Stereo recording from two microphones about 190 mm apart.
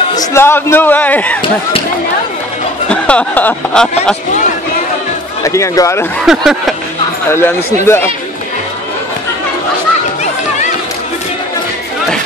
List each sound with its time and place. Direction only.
0.1 s speech: 15° left (ahead or behind)
2.9 s speech: 5° left (ahead or behind)
5.4 s speech: 15° left (ahead or behind)
6.2 s speech: centre (ahead or behind)
7.2 s speech: 15° left (ahead or behind)